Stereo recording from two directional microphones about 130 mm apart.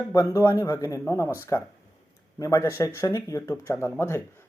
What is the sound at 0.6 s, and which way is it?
Speech, 25° left (ahead or behind).